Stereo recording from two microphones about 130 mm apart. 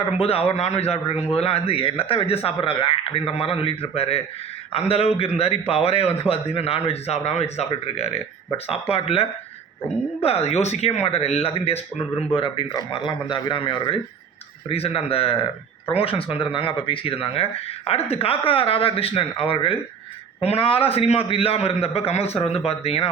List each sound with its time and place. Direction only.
0.0 s speech: 50° left (ahead or behind)
10.2 s speech: 55° left (ahead or behind)